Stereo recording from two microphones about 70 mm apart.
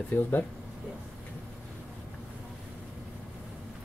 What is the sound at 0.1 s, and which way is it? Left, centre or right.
Speech, left.